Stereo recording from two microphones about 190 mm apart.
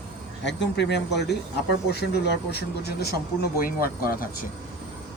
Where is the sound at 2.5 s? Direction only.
60° left (ahead or behind).